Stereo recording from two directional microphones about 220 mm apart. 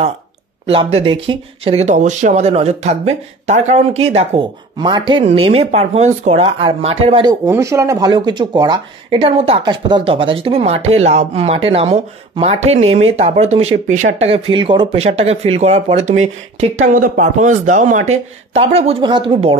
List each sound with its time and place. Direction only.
0.7 s speech: 25° right (ahead or behind)